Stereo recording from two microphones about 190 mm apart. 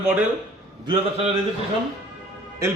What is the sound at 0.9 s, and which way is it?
Speech, 30° right (ahead or behind).